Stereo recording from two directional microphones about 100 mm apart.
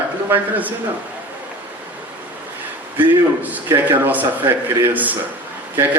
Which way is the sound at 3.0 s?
15° right (ahead or behind).